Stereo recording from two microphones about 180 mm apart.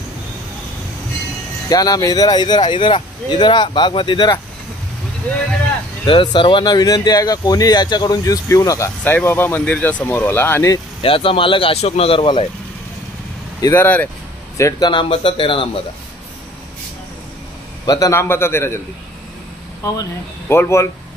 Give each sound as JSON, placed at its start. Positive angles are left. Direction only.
{"t": 1.7, "sound": "speech", "side_deg": 20}
{"t": 6.0, "sound": "speech", "side_deg": 25}
{"t": 11.0, "sound": "speech", "side_deg": 30}
{"t": 13.6, "sound": "speech", "side_deg": 15}
{"t": 14.6, "sound": "speech", "side_deg": 25}
{"t": 17.8, "sound": "speech", "side_deg": 20}
{"t": 19.8, "sound": "speech", "side_deg": 15}